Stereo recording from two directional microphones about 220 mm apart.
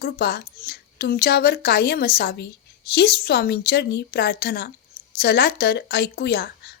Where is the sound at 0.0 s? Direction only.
45° left (ahead or behind).